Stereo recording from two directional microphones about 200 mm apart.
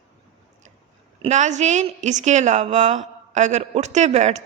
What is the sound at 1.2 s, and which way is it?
A woman's voice, 35° right (ahead or behind).